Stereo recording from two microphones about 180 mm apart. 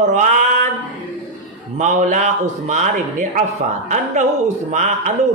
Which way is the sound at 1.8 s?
45° right (ahead or behind).